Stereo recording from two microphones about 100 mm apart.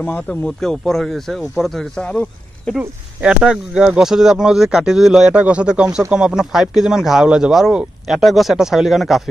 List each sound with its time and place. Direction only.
0.0 s speech: 20° left (ahead or behind)
0.6 s speech: 5° left (ahead or behind)
3.2 s speech: 10° right (ahead or behind)